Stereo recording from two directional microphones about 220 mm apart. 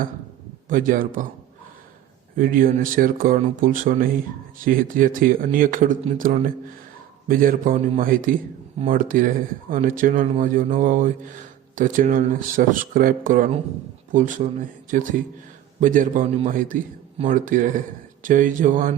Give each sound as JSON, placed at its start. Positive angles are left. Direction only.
{"t": 0.7, "sound": "a man's voice", "side_deg": -40}
{"t": 2.4, "sound": "a man's voice", "side_deg": -40}